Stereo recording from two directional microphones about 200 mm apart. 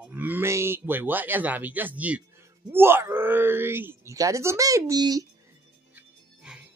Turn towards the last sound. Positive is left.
turn(degrees=-5)  # may be behind; listen again after turning